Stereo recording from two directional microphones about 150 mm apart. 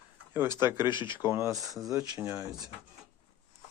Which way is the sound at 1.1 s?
15° right (ahead or behind).